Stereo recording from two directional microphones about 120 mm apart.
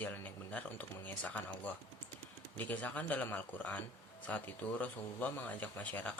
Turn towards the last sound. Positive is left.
turn(degrees=15)  # may be behind; listen again after turning